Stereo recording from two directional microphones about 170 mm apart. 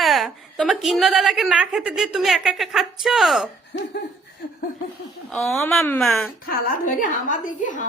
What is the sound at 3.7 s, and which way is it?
Laughter, 90° left.